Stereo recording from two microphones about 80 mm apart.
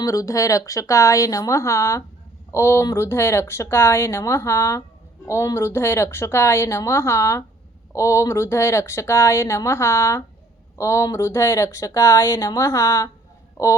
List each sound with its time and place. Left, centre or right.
0.0 s speech: left